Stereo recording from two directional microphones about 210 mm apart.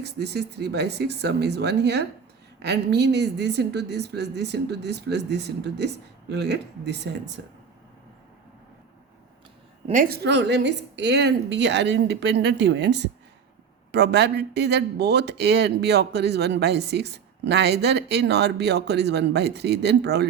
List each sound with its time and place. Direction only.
0.0 s speech: 50° right (ahead or behind)
9.8 s a woman's voice: 40° right (ahead or behind)
10.2 s a woman's voice: 55° right (ahead or behind)